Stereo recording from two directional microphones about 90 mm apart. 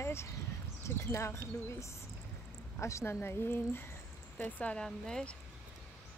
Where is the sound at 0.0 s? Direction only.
30° left (ahead or behind).